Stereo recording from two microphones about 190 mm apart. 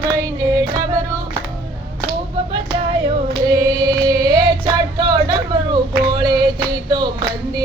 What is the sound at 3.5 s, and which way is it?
Singing, 20° right (ahead or behind).